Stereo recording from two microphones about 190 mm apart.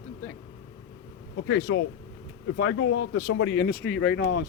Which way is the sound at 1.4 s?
80° left.